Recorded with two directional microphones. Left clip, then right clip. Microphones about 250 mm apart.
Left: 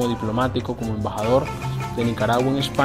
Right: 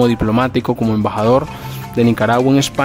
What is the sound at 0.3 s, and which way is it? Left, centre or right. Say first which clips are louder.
Speech: right 7 dB; right.